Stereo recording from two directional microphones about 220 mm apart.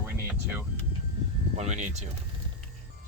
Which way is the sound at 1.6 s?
30° right (ahead or behind).